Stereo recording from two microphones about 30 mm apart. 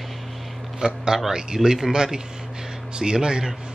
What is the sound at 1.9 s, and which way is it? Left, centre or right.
Speech, right.